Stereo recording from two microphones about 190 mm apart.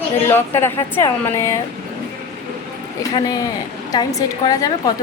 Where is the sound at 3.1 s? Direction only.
20° left (ahead or behind).